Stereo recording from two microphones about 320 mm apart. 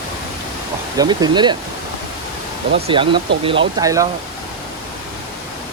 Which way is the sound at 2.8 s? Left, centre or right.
Centre.